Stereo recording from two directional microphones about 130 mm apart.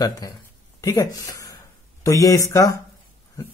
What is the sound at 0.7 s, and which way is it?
A man's voice, 25° left (ahead or behind).